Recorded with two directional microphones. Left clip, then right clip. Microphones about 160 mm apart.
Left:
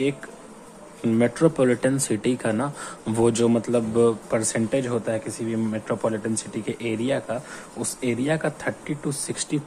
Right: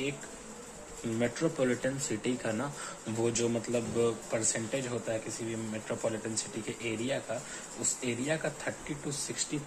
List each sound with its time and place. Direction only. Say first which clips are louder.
1.2 s speech: left 10 dB; 30° left (ahead or behind)
3.2 s speech: left 11 dB; 40° left (ahead or behind)